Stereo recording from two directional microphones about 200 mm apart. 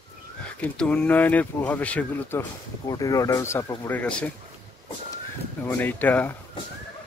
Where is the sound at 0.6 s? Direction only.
5° left (ahead or behind).